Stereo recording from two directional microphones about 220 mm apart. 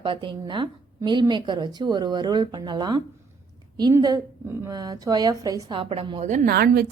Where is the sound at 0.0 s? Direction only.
20° right (ahead or behind).